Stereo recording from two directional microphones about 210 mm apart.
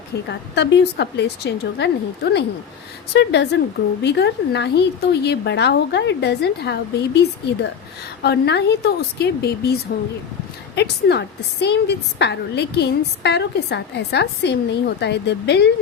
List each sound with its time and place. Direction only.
0.3 s a woman's voice: 55° left (ahead or behind)
3.2 s a woman's voice: 55° left (ahead or behind)
10.8 s a woman's voice: 50° left (ahead or behind)